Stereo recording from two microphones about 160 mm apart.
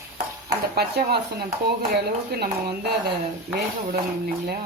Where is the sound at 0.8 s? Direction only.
80° right.